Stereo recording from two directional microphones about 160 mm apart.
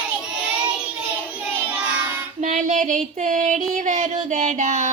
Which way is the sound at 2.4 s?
50° right (ahead or behind).